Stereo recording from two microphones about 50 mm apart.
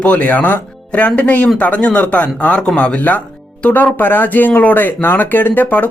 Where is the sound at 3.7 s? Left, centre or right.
Left.